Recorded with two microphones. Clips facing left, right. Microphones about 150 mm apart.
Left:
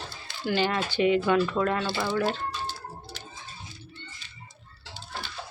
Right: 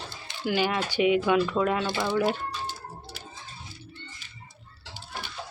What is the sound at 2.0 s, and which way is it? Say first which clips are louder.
Typing: right 1 dB; 15° right (ahead or behind).